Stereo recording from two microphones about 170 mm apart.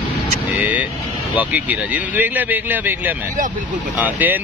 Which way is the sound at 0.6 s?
10° right (ahead or behind).